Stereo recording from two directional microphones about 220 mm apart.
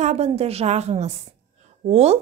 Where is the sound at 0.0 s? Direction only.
30° right (ahead or behind).